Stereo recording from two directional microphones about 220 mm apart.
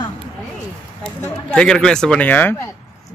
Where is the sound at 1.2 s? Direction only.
5° left (ahead or behind).